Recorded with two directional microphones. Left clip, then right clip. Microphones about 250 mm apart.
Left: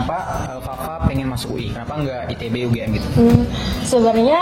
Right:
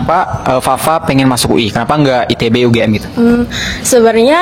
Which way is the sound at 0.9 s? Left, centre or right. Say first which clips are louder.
Right 14 dB; right.